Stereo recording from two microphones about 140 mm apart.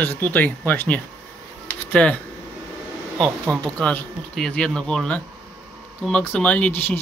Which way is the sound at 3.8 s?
5° left (ahead or behind).